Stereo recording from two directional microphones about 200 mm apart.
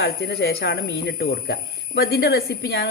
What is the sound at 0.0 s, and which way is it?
A woman's voice, 55° left (ahead or behind).